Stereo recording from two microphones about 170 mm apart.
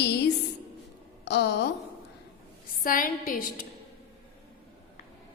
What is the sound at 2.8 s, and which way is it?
Speech, 55° left (ahead or behind).